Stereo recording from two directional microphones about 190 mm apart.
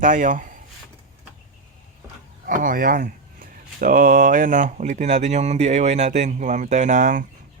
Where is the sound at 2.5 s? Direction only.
45° right (ahead or behind).